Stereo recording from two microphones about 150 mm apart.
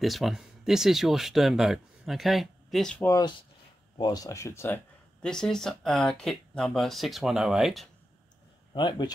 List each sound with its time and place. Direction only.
0.0 s speech: centre (ahead or behind)
3.0 s speech: 20° left (ahead or behind)
5.2 s speech: 5° left (ahead or behind)
8.7 s speech: 30° left (ahead or behind)